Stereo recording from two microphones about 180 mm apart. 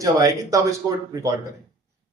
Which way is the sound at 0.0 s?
15° right (ahead or behind).